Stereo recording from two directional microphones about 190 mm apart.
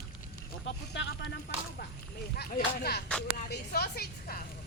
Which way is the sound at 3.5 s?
55° left (ahead or behind).